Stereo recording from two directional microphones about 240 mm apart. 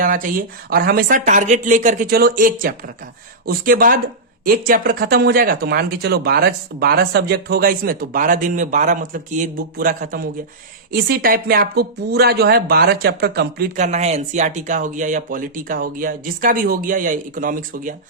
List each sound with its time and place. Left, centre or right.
0.0 s speech: right